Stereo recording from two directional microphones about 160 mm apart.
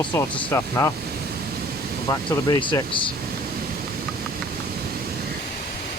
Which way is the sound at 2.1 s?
30° left (ahead or behind).